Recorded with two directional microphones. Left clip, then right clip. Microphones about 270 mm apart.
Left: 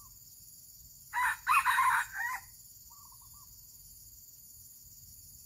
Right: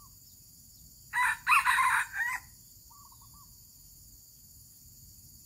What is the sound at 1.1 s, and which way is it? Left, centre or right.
Chicken, right.